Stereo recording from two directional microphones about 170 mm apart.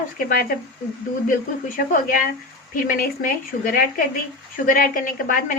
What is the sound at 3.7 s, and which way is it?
A woman's voice, 60° left (ahead or behind).